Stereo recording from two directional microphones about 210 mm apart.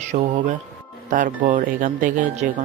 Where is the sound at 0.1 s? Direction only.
35° right (ahead or behind).